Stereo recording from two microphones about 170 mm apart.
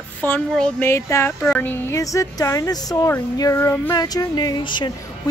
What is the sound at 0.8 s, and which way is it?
Speech, 15° left (ahead or behind).